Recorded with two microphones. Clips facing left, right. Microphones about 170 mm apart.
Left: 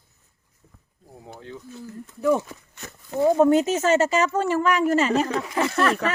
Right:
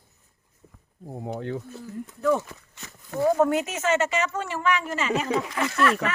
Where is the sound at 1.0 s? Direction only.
60° right (ahead or behind).